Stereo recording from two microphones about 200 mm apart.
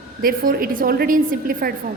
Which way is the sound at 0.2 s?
45° right (ahead or behind).